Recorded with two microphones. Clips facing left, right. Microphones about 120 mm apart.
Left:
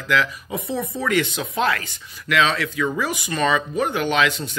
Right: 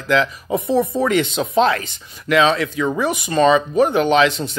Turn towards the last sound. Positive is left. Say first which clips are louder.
# right 6 dB
turn(degrees=-25)  # may be behind; listen again after turning